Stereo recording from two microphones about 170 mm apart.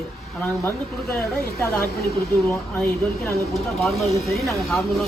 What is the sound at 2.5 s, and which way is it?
Speech, 15° left (ahead or behind).